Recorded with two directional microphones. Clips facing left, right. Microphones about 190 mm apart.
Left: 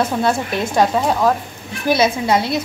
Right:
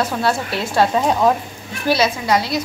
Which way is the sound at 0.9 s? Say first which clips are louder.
Even; centre (ahead or behind).